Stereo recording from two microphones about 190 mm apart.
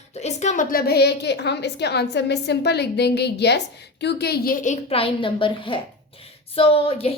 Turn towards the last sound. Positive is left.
turn(degrees=30)  # may be behind; listen again after turning